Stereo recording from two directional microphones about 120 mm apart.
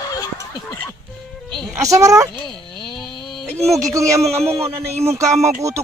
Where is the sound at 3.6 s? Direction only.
25° right (ahead or behind).